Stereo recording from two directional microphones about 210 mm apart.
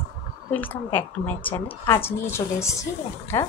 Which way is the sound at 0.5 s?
10° left (ahead or behind).